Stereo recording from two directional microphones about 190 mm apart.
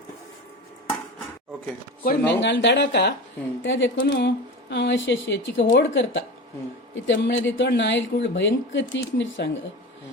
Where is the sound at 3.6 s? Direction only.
75° left (ahead or behind).